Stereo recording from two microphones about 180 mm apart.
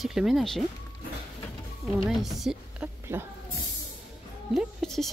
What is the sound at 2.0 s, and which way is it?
Speech, centre (ahead or behind).